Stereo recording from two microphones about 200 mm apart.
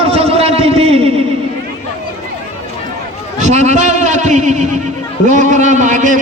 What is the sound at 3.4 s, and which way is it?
A man's voice, 35° right (ahead or behind).